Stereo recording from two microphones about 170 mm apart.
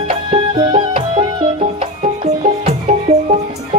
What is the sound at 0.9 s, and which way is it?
Music, 45° right (ahead or behind).